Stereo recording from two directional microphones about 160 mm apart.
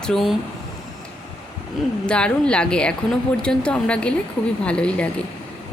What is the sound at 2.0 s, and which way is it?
A woman's voice, 5° left (ahead or behind).